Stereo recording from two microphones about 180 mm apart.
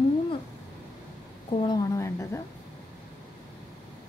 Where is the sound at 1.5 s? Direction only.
40° left (ahead or behind).